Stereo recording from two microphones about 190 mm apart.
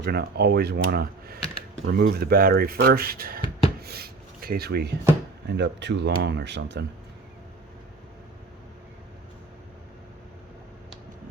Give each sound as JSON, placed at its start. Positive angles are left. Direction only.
{"t": 0.0, "sound": "speech", "side_deg": -60}
{"t": 1.4, "sound": "computer keyboard", "side_deg": 30}
{"t": 2.0, "sound": "speech", "side_deg": -60}
{"t": 3.8, "sound": "a sound", "side_deg": -55}
{"t": 5.5, "sound": "speech", "side_deg": -65}